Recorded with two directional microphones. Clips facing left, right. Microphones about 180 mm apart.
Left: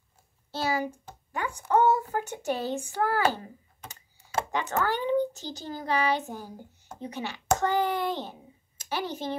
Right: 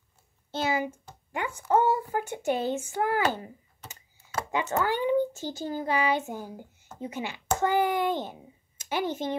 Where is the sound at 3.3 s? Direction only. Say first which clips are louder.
Right 1 dB; 20° right (ahead or behind).